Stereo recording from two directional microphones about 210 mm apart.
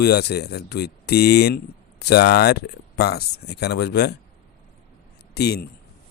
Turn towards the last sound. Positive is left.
turn(degrees=50)  # may be behind; listen again after turning